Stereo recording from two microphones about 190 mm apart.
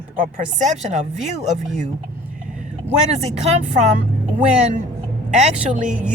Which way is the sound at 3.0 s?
35° right (ahead or behind).